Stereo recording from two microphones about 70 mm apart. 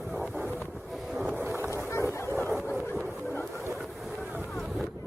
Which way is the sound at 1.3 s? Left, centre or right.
Right.